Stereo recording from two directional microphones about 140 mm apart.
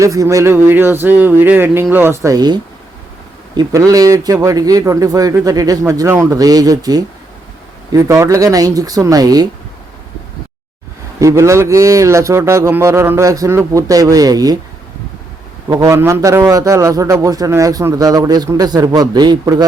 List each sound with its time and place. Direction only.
0.0 s a man's voice: 20° right (ahead or behind)
11.2 s a man's voice: 20° right (ahead or behind)
15.7 s a man's voice: 20° right (ahead or behind)